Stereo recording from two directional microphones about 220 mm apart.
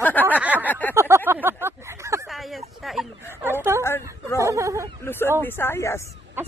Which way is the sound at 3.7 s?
10° right (ahead or behind).